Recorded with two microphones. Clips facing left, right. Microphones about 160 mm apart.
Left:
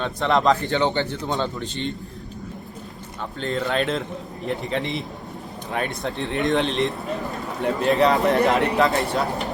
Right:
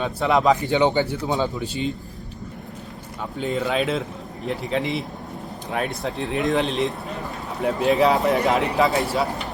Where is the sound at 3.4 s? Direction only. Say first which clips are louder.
Right 1 dB; 10° right (ahead or behind).